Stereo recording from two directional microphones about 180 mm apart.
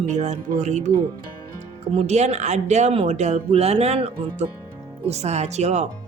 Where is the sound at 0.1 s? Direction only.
40° right (ahead or behind).